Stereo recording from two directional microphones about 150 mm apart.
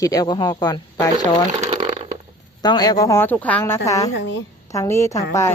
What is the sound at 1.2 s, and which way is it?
Speech, 50° right (ahead or behind).